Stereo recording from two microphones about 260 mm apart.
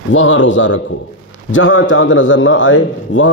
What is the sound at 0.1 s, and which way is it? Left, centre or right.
A man's voice, left.